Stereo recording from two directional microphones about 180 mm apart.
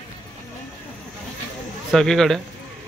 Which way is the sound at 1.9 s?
Centre (ahead or behind).